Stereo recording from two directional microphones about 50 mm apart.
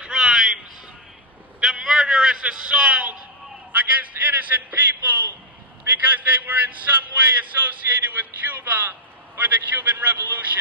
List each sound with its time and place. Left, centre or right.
0.0 s a sound: centre
1.6 s vehicle: centre
2.4 s a man's voice: centre
3.7 s a man's voice: right